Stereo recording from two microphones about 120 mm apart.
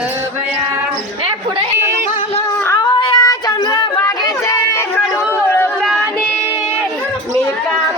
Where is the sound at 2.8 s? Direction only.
35° left (ahead or behind).